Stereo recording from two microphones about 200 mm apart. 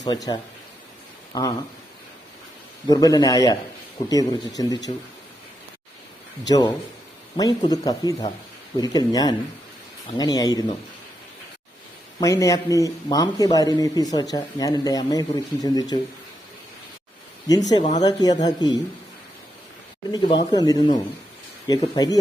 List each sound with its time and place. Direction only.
0.0 s speech: 20° left (ahead or behind)
2.8 s a man's voice: 20° left (ahead or behind)
6.5 s speech: 20° left (ahead or behind)
12.2 s speech: 15° left (ahead or behind)
17.5 s speech: 20° left (ahead or behind)
20.1 s speech: 20° left (ahead or behind)